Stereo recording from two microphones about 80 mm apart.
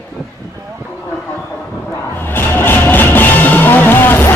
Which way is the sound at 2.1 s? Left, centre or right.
Left.